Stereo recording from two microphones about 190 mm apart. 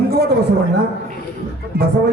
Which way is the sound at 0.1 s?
55° right (ahead or behind).